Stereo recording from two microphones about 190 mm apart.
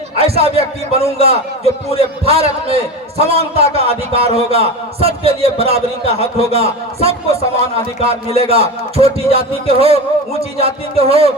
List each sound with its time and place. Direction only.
0.2 s a man's voice: 30° right (ahead or behind)